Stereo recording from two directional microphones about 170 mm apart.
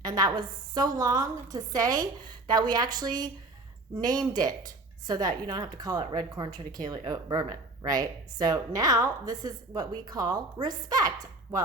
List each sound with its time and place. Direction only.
0.0 s a woman's voice: 25° right (ahead or behind)